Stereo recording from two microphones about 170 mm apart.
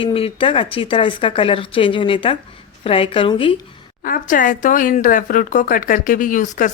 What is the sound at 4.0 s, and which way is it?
A woman's voice, 55° left (ahead or behind).